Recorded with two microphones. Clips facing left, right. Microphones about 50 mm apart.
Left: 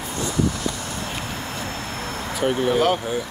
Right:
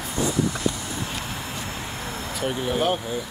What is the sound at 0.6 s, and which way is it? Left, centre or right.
Vehicle, centre.